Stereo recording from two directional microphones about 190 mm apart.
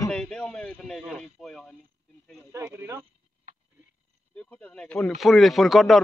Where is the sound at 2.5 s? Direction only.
15° right (ahead or behind).